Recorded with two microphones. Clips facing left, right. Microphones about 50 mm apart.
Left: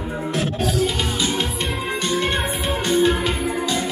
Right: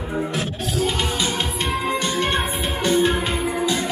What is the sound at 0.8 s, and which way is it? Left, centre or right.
Music, right.